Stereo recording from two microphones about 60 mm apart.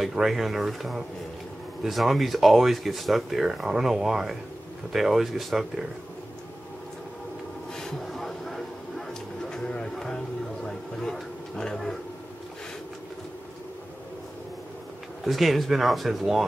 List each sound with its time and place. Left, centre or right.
0.0 s speech: centre
7.7 s a sound: centre
15.2 s speech: centre